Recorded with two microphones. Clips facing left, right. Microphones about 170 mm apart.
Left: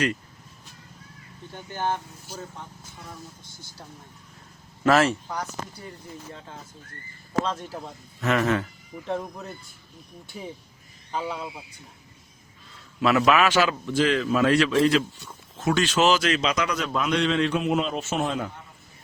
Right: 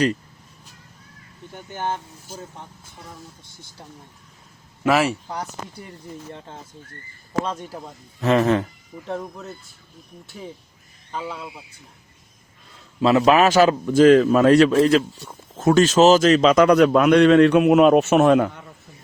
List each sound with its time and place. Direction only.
1.5 s speech: 15° right (ahead or behind)
4.8 s speech: 10° right (ahead or behind)
8.2 s speech: 30° right (ahead or behind)
9.0 s speech: centre (ahead or behind)
13.0 s a man's voice: 30° right (ahead or behind); by 18.5 s 70° right (ahead or behind)